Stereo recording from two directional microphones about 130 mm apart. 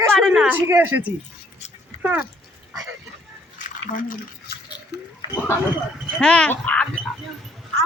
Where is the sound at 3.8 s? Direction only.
90° left.